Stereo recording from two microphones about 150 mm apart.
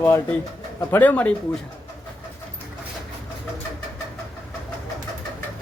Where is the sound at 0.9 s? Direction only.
10° left (ahead or behind).